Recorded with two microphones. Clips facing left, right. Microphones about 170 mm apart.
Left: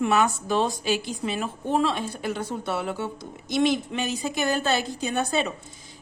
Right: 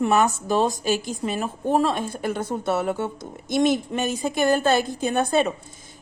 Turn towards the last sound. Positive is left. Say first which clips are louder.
# right 5 dB
turn(degrees=-50)  # may be behind; listen again after turning